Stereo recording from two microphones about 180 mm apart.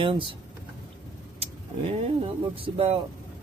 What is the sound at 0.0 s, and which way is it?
Speech, 30° right (ahead or behind).